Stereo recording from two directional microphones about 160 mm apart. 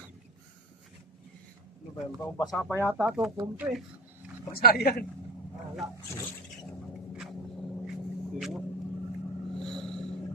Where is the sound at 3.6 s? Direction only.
15° right (ahead or behind).